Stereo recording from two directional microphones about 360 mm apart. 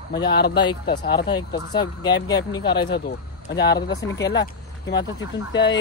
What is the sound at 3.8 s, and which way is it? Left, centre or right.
Speech, centre.